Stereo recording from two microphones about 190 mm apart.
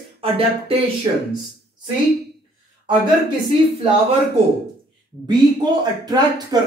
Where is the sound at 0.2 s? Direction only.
30° right (ahead or behind).